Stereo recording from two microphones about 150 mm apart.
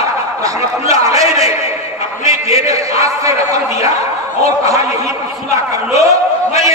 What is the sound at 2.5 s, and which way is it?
A man's voice, 20° right (ahead or behind).